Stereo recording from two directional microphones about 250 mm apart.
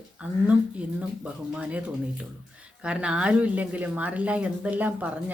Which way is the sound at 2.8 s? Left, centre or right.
Centre.